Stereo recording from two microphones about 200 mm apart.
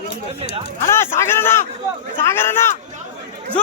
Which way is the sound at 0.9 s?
15° left (ahead or behind).